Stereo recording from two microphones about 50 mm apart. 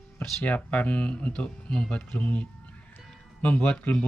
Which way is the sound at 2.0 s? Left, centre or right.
Left.